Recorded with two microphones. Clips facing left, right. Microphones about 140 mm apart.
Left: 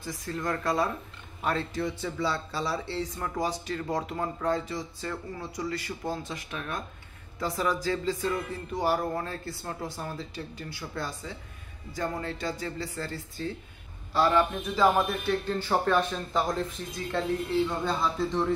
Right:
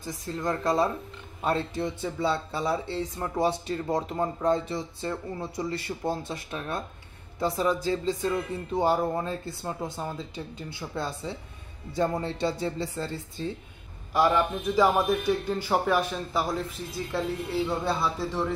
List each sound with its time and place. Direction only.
0.0 s speech: 25° right (ahead or behind)
14.1 s a man's voice: 15° right (ahead or behind)